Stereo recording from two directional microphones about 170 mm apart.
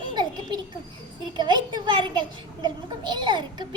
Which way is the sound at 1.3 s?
25° right (ahead or behind).